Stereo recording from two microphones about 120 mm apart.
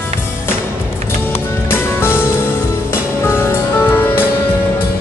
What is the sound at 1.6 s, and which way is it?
Music, 20° left (ahead or behind).